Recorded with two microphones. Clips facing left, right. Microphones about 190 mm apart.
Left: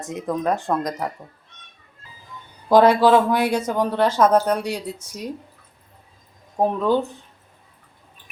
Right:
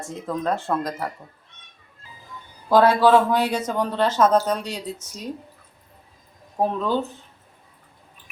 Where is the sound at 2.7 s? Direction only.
15° left (ahead or behind).